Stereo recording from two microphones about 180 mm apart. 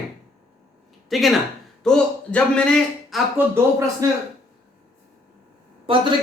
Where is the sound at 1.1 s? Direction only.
Centre (ahead or behind).